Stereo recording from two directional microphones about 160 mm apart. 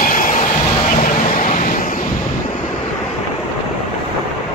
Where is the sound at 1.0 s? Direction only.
55° left (ahead or behind).